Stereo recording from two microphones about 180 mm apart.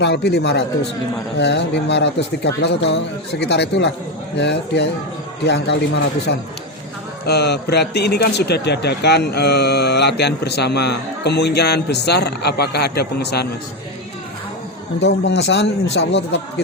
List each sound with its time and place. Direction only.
0.0 s a man's voice: 70° left (ahead or behind)
15.0 s speech: 75° left (ahead or behind)